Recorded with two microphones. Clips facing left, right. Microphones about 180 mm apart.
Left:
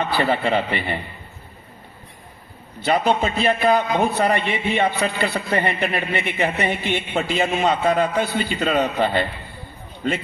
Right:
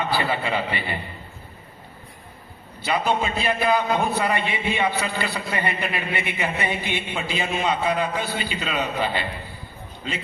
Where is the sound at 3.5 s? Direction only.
50° left (ahead or behind).